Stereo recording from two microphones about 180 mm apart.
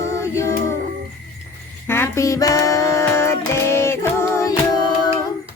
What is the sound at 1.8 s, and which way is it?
Music, 10° left (ahead or behind).